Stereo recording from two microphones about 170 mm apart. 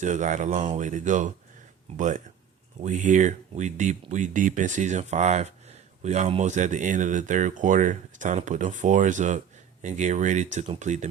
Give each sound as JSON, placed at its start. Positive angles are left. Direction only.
{"t": 0.0, "sound": "speech", "side_deg": -45}